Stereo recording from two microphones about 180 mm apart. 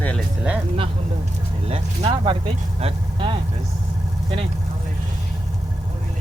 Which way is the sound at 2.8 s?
30° right (ahead or behind).